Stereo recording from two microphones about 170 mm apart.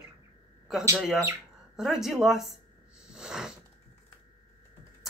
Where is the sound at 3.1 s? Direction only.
5° right (ahead or behind).